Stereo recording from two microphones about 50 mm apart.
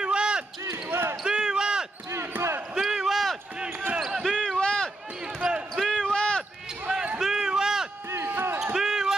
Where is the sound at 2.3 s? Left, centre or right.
Right.